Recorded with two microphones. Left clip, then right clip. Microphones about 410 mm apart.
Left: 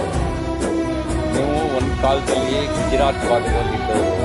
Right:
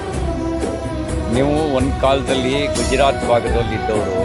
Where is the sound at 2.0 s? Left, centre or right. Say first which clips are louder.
Right 1 dB; right.